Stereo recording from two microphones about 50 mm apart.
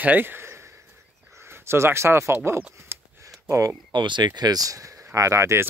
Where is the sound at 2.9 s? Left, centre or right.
Right.